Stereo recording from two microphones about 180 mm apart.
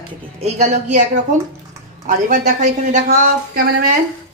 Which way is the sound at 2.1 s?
50° right (ahead or behind).